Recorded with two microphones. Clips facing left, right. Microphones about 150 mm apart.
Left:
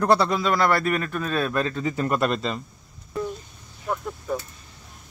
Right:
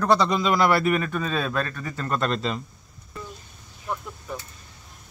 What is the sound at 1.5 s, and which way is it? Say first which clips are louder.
Speech: left 4 dB; 20° left (ahead or behind).